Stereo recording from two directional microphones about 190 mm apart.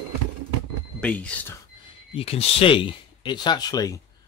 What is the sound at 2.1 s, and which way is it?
Speech, 30° left (ahead or behind).